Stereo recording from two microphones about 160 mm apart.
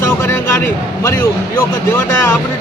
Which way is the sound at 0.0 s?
15° left (ahead or behind).